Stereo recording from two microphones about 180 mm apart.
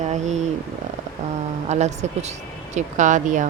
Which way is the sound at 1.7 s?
40° right (ahead or behind).